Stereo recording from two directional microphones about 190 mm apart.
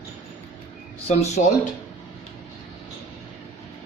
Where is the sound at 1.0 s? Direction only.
35° left (ahead or behind).